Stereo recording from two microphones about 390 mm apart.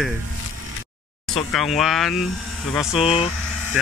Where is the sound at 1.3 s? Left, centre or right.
Centre.